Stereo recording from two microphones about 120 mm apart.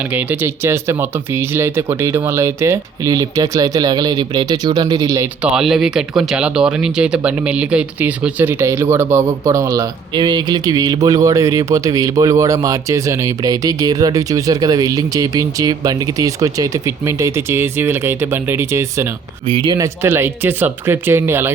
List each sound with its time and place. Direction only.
0.1 s speech: 15° right (ahead or behind)
5.4 s speech: 5° right (ahead or behind); by 19.1 s 20° right (ahead or behind)
19.5 s speech: 45° right (ahead or behind)
19.7 s speech: 25° right (ahead or behind)